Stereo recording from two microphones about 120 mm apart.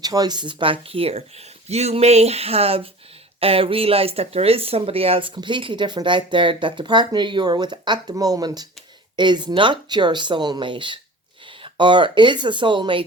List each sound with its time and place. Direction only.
0.0 s speech: 35° right (ahead or behind)